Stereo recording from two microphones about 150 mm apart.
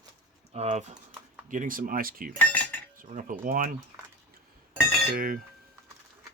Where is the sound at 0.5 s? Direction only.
50° right (ahead or behind).